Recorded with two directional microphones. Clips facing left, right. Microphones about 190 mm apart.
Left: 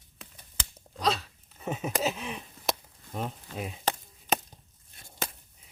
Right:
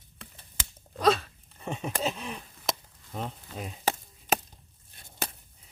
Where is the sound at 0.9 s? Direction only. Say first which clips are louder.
Right 5 dB; 55° right (ahead or behind).